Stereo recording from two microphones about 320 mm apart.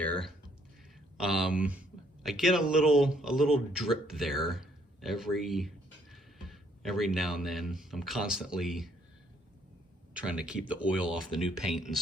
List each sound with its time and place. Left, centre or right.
0.0 s speech: centre
1.5 s speech: centre
10.2 s speech: centre